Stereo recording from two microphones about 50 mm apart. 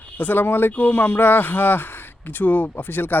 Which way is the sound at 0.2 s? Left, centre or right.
Left.